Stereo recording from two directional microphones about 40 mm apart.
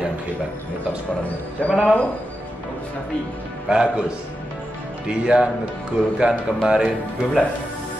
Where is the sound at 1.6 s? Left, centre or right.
Left.